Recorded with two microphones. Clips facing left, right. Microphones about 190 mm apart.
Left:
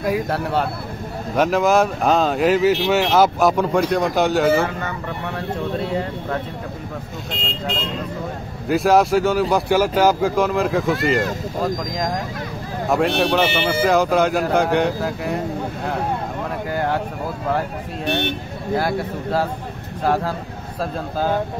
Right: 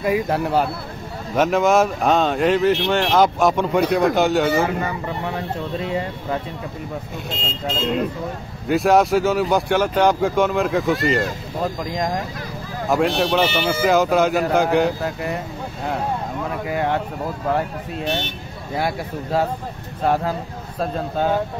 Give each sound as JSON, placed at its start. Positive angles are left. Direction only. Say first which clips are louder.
{"t": 0.0, "sound": "speech", "louder": "right 1 dB", "side_deg": -5}
{"t": 8.6, "sound": "speech", "louder": "even", "side_deg": 0}
{"t": 16.7, "sound": "speech", "louder": "even", "side_deg": 0}
{"t": 18.0, "sound": "speech", "louder": "left 3 dB", "side_deg": 60}